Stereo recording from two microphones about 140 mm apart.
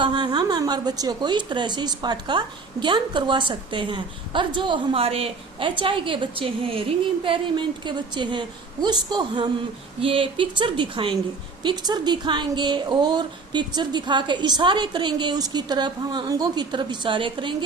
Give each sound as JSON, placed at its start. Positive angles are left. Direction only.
{"t": 0.0, "sound": "speech", "side_deg": -35}